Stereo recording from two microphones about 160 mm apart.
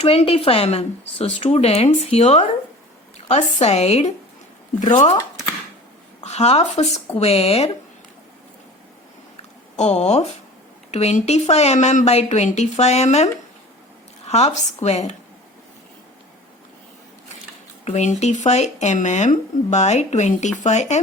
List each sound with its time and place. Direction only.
0.0 s speech: 40° left (ahead or behind)
6.2 s speech: 40° left (ahead or behind)
9.7 s speech: 45° left (ahead or behind)
17.8 s speech: 45° left (ahead or behind)